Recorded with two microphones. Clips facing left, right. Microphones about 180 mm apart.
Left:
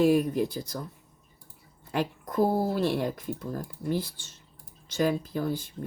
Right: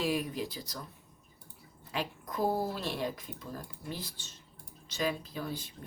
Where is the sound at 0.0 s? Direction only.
50° left (ahead or behind).